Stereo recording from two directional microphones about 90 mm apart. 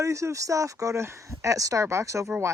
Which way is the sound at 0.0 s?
35° right (ahead or behind).